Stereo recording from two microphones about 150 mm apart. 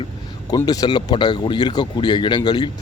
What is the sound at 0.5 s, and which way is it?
Speech, 25° left (ahead or behind).